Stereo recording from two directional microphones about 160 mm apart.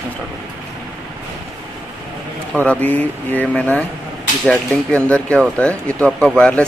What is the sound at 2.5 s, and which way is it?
Speech, 10° left (ahead or behind).